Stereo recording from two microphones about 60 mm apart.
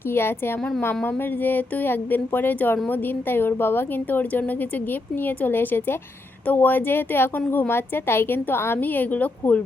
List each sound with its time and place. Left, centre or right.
0.1 s a woman's voice: left
8.8 s a woman's voice: left